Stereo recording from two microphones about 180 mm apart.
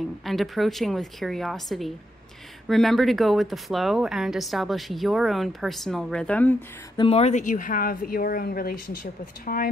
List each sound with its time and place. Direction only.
0.2 s speech: centre (ahead or behind)
7.0 s a woman's voice: 35° left (ahead or behind); by 9.7 s 55° left (ahead or behind)